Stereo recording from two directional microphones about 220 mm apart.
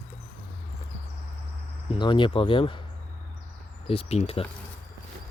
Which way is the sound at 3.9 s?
25° left (ahead or behind).